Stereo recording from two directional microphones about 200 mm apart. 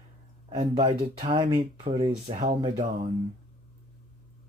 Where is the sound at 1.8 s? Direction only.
30° right (ahead or behind).